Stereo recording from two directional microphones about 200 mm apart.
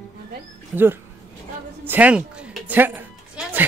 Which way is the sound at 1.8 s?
10° right (ahead or behind).